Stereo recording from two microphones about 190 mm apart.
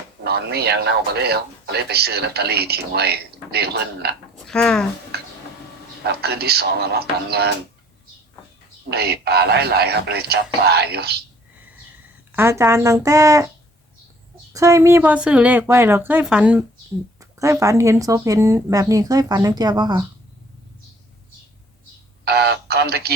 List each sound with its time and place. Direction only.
0.3 s speech: 60° right (ahead or behind)
4.4 s speech: 5° left (ahead or behind)
5.1 s a sound: 55° right (ahead or behind)
6.0 s speech: 60° right (ahead or behind)
8.9 s speech: 55° right (ahead or behind)
12.4 s speech: 15° right (ahead or behind)
14.5 s speech: 15° right (ahead or behind)
22.2 s speech: 60° right (ahead or behind)